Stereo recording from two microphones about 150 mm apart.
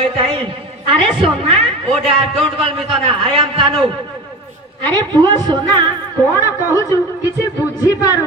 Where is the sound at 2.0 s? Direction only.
35° right (ahead or behind).